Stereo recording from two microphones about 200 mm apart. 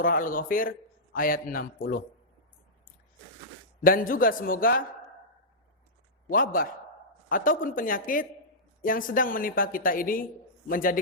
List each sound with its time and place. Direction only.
0.0 s a woman's voice: 45° left (ahead or behind)
3.8 s a woman's voice: 45° left (ahead or behind)
6.2 s a woman's voice: 45° left (ahead or behind)